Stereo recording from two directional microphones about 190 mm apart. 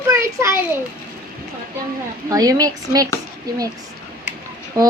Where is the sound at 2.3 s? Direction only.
20° right (ahead or behind).